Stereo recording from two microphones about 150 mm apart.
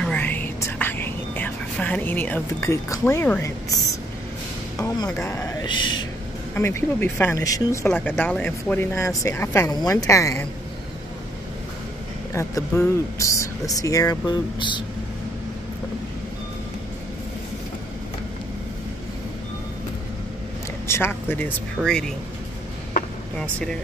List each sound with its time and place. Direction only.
0.0 s whispering: 10° left (ahead or behind)
4.8 s speech: 25° left (ahead or behind)
5.7 s speech: 30° left (ahead or behind)
6.5 s speech: 15° left (ahead or behind)
7.9 s speech: 10° left (ahead or behind)
12.4 s speech: 20° left (ahead or behind)
20.8 s speech: 15° left (ahead or behind)
23.4 s speech: 5° left (ahead or behind)